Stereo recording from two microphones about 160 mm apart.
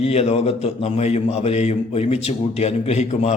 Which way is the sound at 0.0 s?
40° left (ahead or behind).